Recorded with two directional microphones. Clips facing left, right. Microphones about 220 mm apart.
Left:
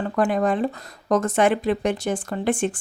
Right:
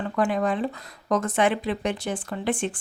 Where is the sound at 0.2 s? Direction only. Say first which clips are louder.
Left 3 dB; 45° left (ahead or behind).